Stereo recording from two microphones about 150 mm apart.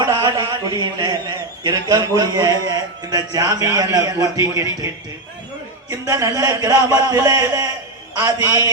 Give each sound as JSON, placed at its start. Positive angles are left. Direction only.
{"t": 0.0, "sound": "a man's voice", "side_deg": -30}
{"t": 5.9, "sound": "a man's voice", "side_deg": -20}